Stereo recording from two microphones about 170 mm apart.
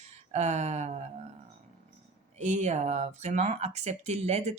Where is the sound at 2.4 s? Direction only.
40° right (ahead or behind).